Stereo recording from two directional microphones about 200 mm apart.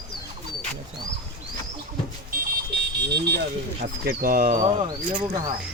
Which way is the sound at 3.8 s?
50° right (ahead or behind).